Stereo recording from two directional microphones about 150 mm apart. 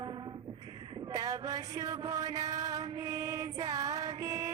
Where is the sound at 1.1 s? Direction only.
25° right (ahead or behind).